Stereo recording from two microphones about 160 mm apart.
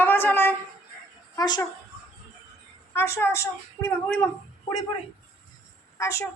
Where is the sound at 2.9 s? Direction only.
15° left (ahead or behind).